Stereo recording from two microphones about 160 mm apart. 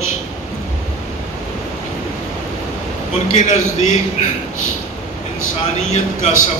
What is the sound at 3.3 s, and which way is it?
Speech, 45° left (ahead or behind).